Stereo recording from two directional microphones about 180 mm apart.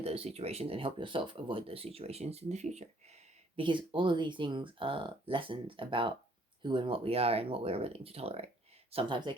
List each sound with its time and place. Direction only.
0.0 s speech: 35° right (ahead or behind)
3.5 s speech: 25° right (ahead or behind)